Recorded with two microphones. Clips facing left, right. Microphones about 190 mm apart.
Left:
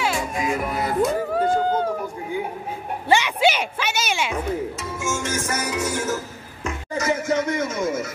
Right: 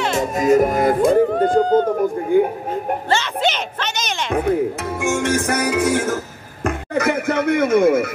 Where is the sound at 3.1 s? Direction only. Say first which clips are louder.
Left 3 dB; 10° left (ahead or behind).